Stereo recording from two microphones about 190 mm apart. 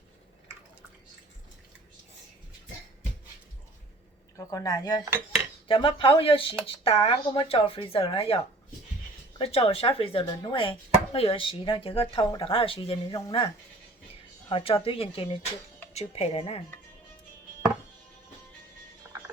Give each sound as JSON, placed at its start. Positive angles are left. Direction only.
{"t": 4.4, "sound": "chopping", "side_deg": 20}
{"t": 9.4, "sound": "chopping", "side_deg": 30}
{"t": 13.1, "sound": "speech", "side_deg": 15}
{"t": 14.5, "sound": "chopping", "side_deg": 30}
{"t": 15.9, "sound": "speech", "side_deg": 35}
{"t": 19.1, "sound": "mechanisms", "side_deg": -10}